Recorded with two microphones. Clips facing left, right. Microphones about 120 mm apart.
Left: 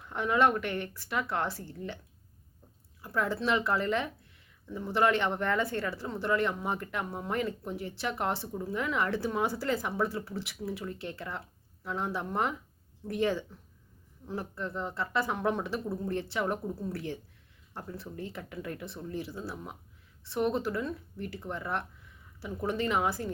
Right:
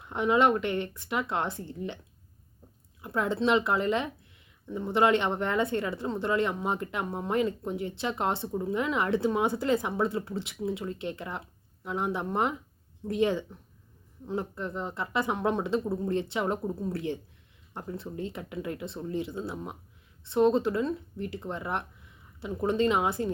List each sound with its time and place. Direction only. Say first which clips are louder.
0.0 s speech: right 3 dB; 20° right (ahead or behind)
3.0 s speech: right 3 dB; 20° right (ahead or behind)